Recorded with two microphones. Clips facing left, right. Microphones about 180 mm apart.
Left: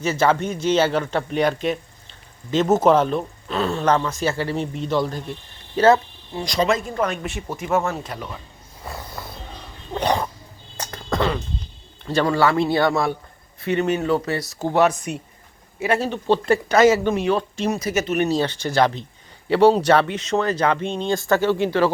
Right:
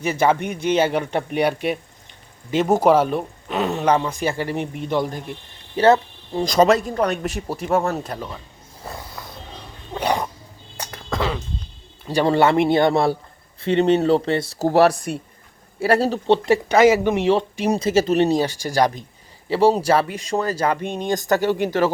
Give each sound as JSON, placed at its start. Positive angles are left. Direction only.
{"t": 0.0, "sound": "speech", "side_deg": -15}
{"t": 5.9, "sound": "speech", "side_deg": -40}
{"t": 9.9, "sound": "wild animals", "side_deg": -10}
{"t": 10.8, "sound": "a sound", "side_deg": -5}
{"t": 12.2, "sound": "speech", "side_deg": -25}
{"t": 15.1, "sound": "speech", "side_deg": -5}
{"t": 15.8, "sound": "speech", "side_deg": -35}
{"t": 16.2, "sound": "speech", "side_deg": -20}
{"t": 18.3, "sound": "speech", "side_deg": -10}